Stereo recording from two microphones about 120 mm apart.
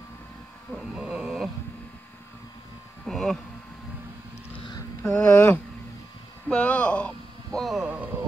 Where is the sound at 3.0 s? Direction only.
Centre (ahead or behind).